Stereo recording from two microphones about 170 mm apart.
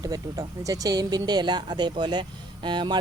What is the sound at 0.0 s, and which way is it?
Speech, 20° right (ahead or behind).